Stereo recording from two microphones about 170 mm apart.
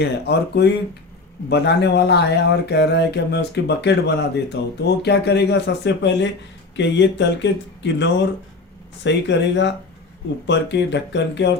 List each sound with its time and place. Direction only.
0.0 s speech: 75° left (ahead or behind)